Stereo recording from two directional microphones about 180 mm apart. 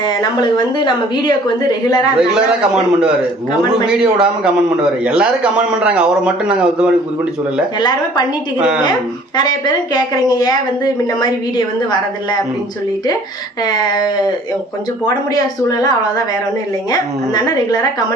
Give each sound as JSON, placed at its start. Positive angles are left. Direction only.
{"t": 0.2, "sound": "a woman's voice", "side_deg": 25}
{"t": 2.1, "sound": "a man's voice", "side_deg": -5}
{"t": 7.8, "sound": "a woman's voice", "side_deg": 25}
{"t": 9.4, "sound": "a woman's voice", "side_deg": 25}
{"t": 13.7, "sound": "a woman's voice", "side_deg": 25}
{"t": 16.9, "sound": "a woman's voice", "side_deg": 20}